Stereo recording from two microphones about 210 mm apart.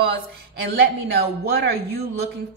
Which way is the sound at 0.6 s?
50° right (ahead or behind).